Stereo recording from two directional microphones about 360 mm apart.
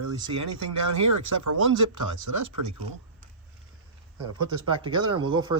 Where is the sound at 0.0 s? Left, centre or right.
Right.